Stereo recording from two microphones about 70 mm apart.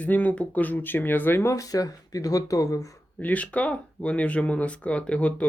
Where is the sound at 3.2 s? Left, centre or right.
Left.